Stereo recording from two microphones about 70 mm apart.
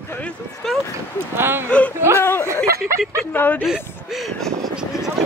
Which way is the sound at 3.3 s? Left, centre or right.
Left.